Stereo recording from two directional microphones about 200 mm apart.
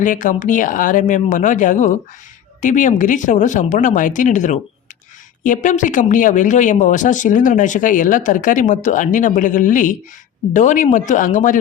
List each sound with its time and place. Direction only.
0.0 s speech: 40° left (ahead or behind)